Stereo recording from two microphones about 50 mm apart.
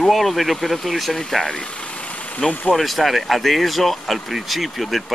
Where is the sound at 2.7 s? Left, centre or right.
Centre.